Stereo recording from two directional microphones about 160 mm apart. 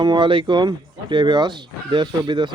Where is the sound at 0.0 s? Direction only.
30° right (ahead or behind).